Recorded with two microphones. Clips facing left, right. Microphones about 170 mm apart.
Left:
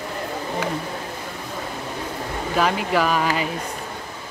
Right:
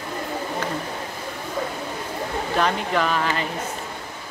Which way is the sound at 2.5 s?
5° left (ahead or behind).